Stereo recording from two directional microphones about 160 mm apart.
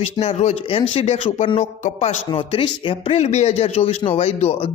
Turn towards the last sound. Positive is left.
turn(degrees=40)  # may be behind; listen again after turning